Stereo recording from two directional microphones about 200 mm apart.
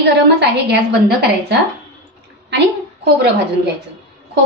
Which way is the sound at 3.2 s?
55° right (ahead or behind).